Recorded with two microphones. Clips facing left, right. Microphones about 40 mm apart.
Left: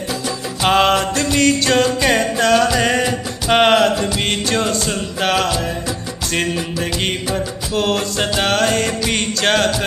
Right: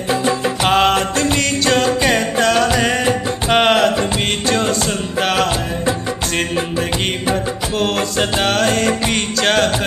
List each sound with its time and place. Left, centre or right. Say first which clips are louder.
0.1 s music: right 10 dB; right
0.7 s music: left 1 dB; centre
7.7 s music: left 1 dB; centre